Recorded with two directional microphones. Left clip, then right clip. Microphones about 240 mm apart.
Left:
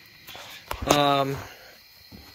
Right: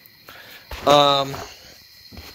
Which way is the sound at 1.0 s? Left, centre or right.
Centre.